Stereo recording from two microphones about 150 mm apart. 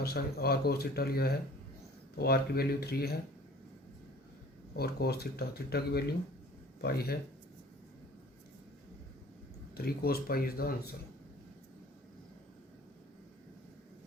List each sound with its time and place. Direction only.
0.0 s speech: 90° left
4.8 s speech: 90° left
9.7 s speech: 90° left